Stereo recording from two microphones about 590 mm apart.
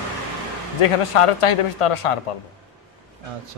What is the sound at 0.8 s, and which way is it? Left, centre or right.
Speech, left.